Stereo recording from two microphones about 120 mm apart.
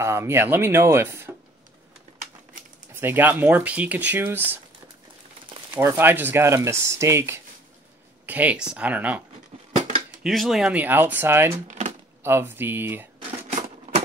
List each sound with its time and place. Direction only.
0.0 s speech: 25° right (ahead or behind)
2.9 s speech: 20° right (ahead or behind)
5.8 s speech: 20° right (ahead or behind)
10.2 s speech: centre (ahead or behind); by 13.1 s 15° right (ahead or behind)
13.5 s a sound: 70° right (ahead or behind)